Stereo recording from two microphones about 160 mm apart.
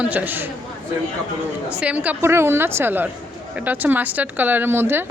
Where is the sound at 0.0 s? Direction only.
10° right (ahead or behind).